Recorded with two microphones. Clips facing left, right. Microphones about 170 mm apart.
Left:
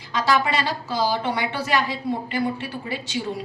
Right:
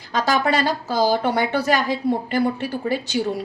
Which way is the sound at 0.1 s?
45° right (ahead or behind).